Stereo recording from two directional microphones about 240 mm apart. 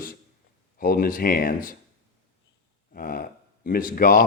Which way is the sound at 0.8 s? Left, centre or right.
Left.